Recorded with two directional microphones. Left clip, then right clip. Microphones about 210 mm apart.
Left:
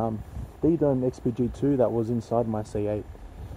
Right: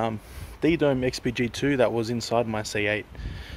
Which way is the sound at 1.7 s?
35° right (ahead or behind).